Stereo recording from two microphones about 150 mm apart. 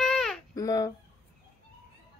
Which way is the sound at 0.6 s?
25° left (ahead or behind).